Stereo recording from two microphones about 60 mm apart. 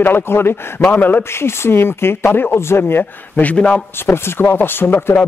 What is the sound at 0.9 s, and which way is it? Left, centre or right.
Speech, left.